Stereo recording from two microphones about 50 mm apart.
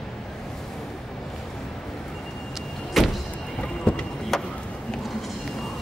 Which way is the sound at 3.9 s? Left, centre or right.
Left.